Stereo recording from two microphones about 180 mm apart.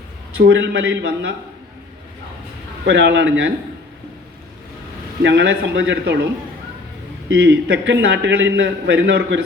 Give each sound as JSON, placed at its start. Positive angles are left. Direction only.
{"t": 0.3, "sound": "a man's voice", "side_deg": -75}
{"t": 2.8, "sound": "speech", "side_deg": -85}
{"t": 5.2, "sound": "a man's voice", "side_deg": -85}
{"t": 7.3, "sound": "a man's voice", "side_deg": -85}